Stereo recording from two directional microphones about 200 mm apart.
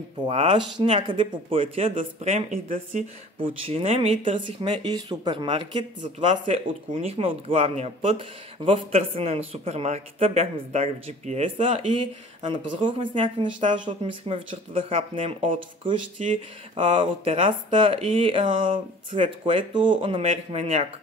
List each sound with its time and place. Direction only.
0.3 s speech: 25° right (ahead or behind)
2.0 s speech: 40° right (ahead or behind)
3.3 s speech: 25° right (ahead or behind)
16.7 s speech: 25° right (ahead or behind)